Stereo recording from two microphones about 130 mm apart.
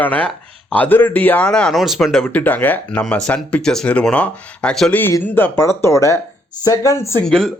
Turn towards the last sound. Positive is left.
turn(degrees=5)  # may be behind; listen again after turning